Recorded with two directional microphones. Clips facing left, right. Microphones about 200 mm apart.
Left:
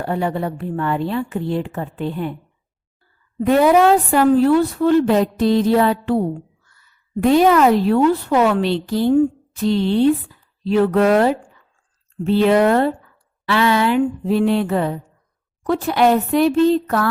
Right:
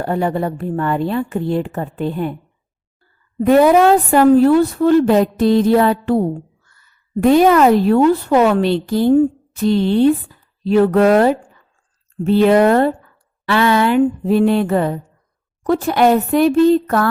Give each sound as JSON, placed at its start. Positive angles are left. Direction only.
{"t": 0.0, "sound": "a woman's voice", "side_deg": -45}
{"t": 3.4, "sound": "a woman's voice", "side_deg": -50}